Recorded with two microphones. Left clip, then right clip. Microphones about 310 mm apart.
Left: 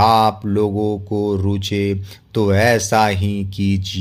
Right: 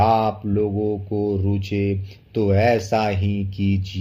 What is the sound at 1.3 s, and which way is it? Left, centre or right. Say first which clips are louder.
Speech: left 4 dB; left.